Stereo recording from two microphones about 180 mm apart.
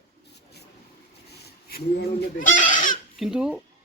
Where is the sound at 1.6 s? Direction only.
55° left (ahead or behind).